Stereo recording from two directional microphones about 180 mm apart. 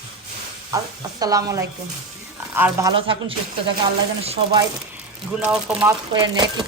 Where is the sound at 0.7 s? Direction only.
20° right (ahead or behind).